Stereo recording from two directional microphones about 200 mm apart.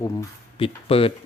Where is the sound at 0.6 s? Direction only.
30° left (ahead or behind).